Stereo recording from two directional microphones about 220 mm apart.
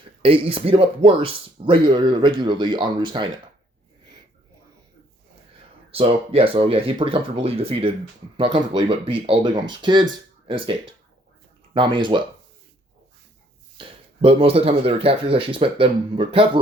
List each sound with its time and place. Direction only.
0.0 s speech: 25° right (ahead or behind)
6.0 s speech: 25° right (ahead or behind)
13.7 s speech: 25° right (ahead or behind)